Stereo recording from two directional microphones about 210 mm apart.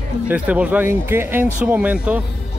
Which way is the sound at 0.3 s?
5° right (ahead or behind).